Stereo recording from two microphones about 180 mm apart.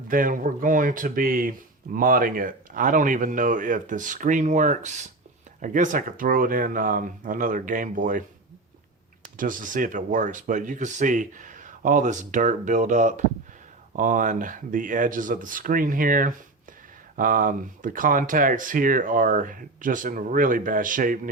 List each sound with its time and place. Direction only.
0.1 s speech: 50° right (ahead or behind)
9.4 s speech: 45° right (ahead or behind)